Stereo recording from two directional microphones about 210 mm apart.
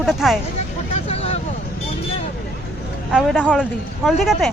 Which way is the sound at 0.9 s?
30° left (ahead or behind).